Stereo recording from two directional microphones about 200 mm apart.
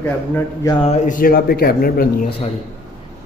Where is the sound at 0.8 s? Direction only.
35° left (ahead or behind).